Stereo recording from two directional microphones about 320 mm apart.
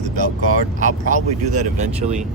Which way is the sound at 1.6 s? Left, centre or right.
Right.